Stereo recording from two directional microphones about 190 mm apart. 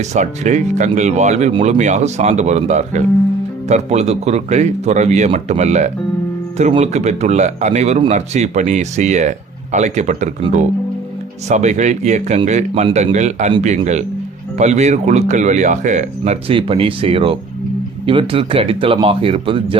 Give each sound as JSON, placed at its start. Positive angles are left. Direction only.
{"t": 0.0, "sound": "speech", "side_deg": -40}
{"t": 11.4, "sound": "speech", "side_deg": -35}